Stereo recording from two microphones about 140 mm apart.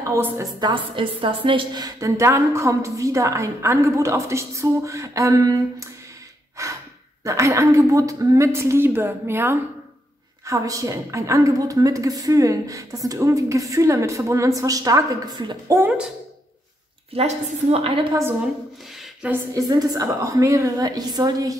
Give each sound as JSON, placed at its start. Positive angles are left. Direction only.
{"t": 0.0, "sound": "a woman's voice", "side_deg": -20}
{"t": 6.6, "sound": "gasp", "side_deg": -20}
{"t": 7.2, "sound": "a woman's voice", "side_deg": -20}
{"t": 15.8, "sound": "speech", "side_deg": -5}
{"t": 17.1, "sound": "a woman's voice", "side_deg": -45}
{"t": 19.5, "sound": "a woman's voice", "side_deg": -25}